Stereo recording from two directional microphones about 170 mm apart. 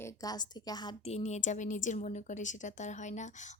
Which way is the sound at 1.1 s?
40° left (ahead or behind).